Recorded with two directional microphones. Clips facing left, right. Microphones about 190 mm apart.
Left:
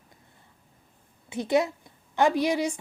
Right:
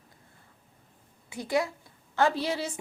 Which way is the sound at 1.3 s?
20° left (ahead or behind).